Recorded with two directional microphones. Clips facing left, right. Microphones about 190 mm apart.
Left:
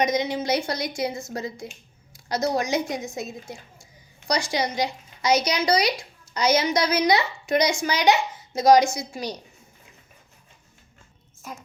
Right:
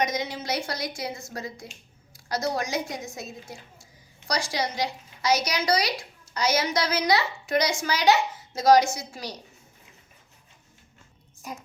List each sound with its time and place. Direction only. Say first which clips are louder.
0.0 s a child's voice: left 5 dB; 20° left (ahead or behind)
4.3 s a child's voice: left 3 dB; 20° left (ahead or behind)